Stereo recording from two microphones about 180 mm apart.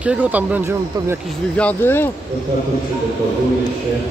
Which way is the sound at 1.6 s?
10° left (ahead or behind).